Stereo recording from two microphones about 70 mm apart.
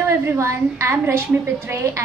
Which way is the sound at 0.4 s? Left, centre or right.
Right.